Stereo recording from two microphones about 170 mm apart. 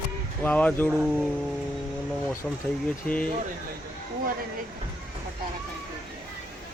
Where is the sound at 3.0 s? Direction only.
5° left (ahead or behind).